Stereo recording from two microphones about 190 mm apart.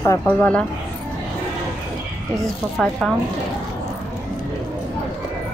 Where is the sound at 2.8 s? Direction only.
5° left (ahead or behind).